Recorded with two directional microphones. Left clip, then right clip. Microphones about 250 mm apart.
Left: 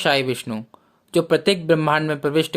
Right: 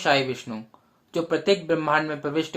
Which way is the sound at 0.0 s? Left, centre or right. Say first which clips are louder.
Left 3 dB; left.